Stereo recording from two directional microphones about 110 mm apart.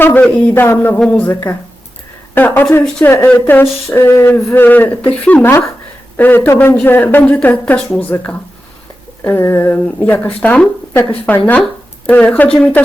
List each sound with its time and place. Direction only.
0.0 s a woman's voice: 15° left (ahead or behind)
0.9 s a woman's voice: 5° left (ahead or behind)
1.2 s a woman's voice: 20° left (ahead or behind)